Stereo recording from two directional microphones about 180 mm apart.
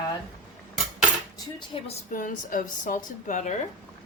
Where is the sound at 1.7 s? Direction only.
30° left (ahead or behind).